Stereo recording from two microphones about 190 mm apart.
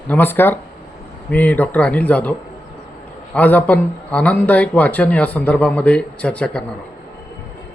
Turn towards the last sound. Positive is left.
turn(degrees=5)  # may be behind; listen again after turning